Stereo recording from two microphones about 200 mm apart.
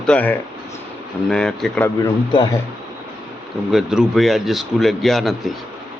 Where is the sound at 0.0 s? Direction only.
5° left (ahead or behind).